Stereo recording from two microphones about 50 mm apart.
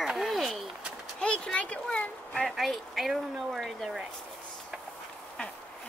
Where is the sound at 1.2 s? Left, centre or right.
Left.